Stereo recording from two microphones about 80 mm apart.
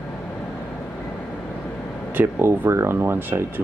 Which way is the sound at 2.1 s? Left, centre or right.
Right.